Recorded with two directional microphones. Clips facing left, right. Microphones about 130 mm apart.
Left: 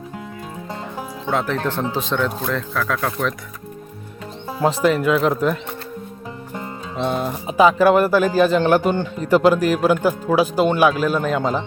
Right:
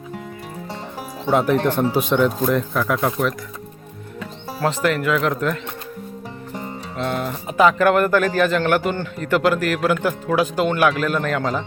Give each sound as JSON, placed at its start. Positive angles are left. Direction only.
{"t": 1.3, "sound": "speech", "side_deg": -15}
{"t": 4.6, "sound": "speech", "side_deg": 15}
{"t": 6.9, "sound": "speech", "side_deg": 15}